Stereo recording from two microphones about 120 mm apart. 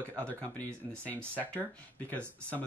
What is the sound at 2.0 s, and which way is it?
Speech, 10° left (ahead or behind).